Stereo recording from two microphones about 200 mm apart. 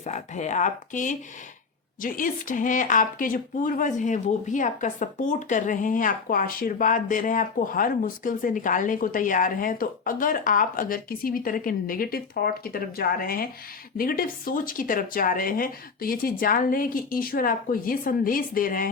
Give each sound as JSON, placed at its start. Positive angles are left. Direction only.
{"t": 0.0, "sound": "speech", "side_deg": 35}